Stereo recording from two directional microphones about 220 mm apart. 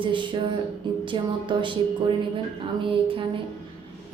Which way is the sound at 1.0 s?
20° right (ahead or behind).